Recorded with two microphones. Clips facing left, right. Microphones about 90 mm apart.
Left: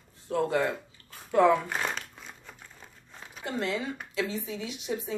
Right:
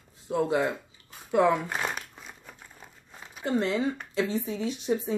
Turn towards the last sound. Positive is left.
turn(degrees=-35)  # may be behind; listen again after turning